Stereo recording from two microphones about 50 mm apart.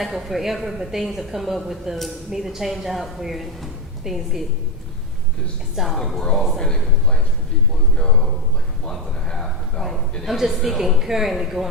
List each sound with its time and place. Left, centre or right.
0.0 s a woman's voice: centre
5.7 s a woman's voice: centre
6.6 s a man's voice: centre
8.8 s a sound: centre
10.2 s a woman's voice: centre